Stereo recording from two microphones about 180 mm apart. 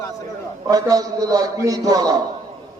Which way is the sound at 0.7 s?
20° right (ahead or behind).